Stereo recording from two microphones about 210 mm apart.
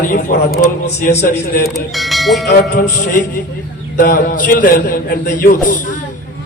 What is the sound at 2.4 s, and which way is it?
Music, 50° left (ahead or behind).